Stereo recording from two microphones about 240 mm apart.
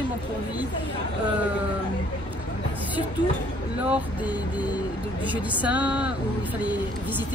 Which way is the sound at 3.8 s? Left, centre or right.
Centre.